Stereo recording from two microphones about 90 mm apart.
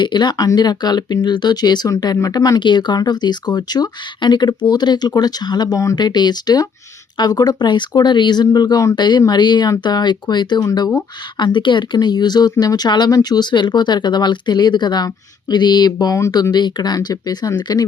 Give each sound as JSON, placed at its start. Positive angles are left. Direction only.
{"t": 0.0, "sound": "speech", "side_deg": 60}
{"t": 6.0, "sound": "speech", "side_deg": 50}
{"t": 9.0, "sound": "speech", "side_deg": 55}